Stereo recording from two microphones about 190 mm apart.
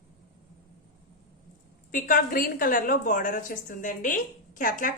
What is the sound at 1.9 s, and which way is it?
A woman's voice, 45° left (ahead or behind).